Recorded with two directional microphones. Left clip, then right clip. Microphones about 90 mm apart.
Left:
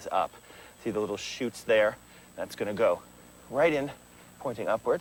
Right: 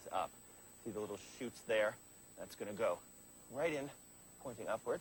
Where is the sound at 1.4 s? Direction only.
60° left (ahead or behind).